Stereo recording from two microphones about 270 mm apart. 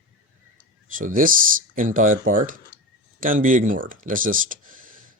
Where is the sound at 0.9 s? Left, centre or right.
Right.